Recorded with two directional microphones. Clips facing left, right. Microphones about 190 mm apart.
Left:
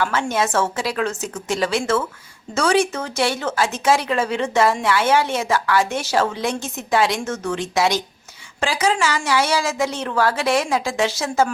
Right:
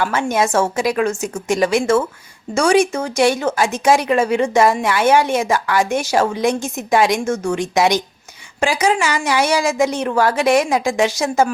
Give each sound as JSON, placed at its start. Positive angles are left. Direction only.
{"t": 0.0, "sound": "speech", "side_deg": -15}